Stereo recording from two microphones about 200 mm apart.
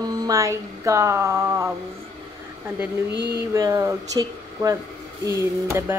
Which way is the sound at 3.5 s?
15° right (ahead or behind).